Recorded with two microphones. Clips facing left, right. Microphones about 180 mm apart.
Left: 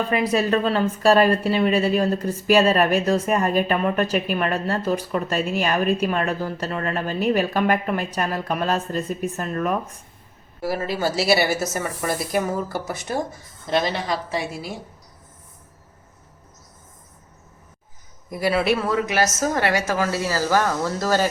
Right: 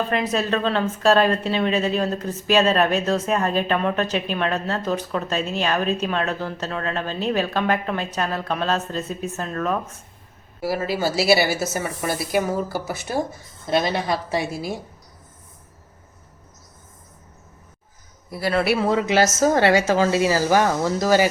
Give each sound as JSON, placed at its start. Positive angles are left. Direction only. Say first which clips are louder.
{"t": 0.1, "sound": "speech", "louder": "left 2 dB", "side_deg": 10}
{"t": 10.6, "sound": "a woman's voice", "louder": "right 1 dB", "side_deg": -5}
{"t": 18.3, "sound": "speech", "louder": "left 1 dB", "side_deg": 15}
{"t": 18.8, "sound": "a woman's voice", "louder": "right 3 dB", "side_deg": -25}